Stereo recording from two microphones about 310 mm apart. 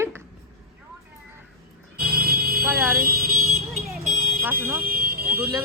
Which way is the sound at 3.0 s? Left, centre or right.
Right.